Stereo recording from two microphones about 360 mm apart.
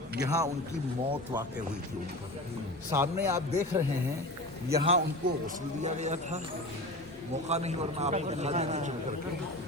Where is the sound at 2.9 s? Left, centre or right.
Centre.